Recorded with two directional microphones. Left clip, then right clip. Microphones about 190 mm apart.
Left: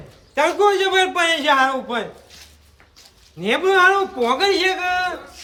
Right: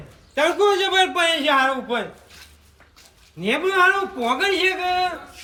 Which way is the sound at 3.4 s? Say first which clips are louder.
Left 3 dB; 5° left (ahead or behind).